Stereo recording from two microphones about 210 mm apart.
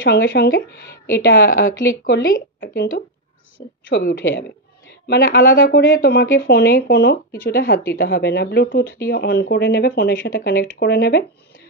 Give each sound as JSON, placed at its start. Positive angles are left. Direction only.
{"t": 0.0, "sound": "speech", "side_deg": 45}
{"t": 3.9, "sound": "speech", "side_deg": 50}